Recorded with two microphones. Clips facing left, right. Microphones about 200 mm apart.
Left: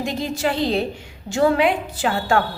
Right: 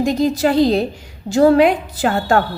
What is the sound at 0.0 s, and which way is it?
A woman's voice, 40° right (ahead or behind).